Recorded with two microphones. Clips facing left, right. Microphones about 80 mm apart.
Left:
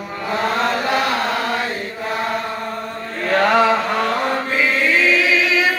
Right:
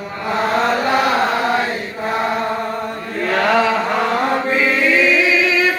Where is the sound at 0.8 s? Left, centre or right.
Right.